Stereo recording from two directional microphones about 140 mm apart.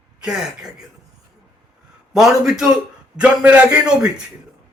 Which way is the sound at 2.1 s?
5° right (ahead or behind).